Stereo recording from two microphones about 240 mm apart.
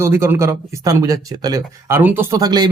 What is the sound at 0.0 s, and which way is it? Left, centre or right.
Speech, centre.